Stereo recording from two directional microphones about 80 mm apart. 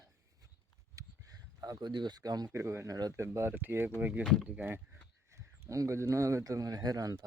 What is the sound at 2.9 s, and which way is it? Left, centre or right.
Speech, right.